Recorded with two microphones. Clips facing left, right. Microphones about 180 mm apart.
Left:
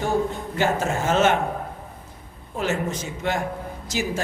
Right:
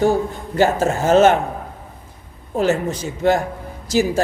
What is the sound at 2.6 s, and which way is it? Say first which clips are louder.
A man's voice: right 7 dB; 35° right (ahead or behind).